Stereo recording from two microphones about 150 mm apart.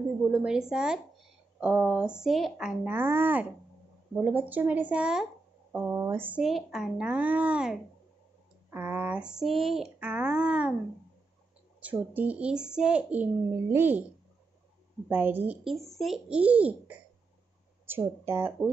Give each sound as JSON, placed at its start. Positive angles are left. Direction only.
{"t": 0.3, "sound": "a child's voice", "side_deg": -5}
{"t": 11.8, "sound": "a child's voice", "side_deg": -10}
{"t": 15.0, "sound": "a child's voice", "side_deg": -15}